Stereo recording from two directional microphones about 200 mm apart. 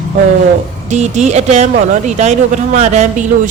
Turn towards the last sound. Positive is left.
turn(degrees=-35)  # may be behind; listen again after turning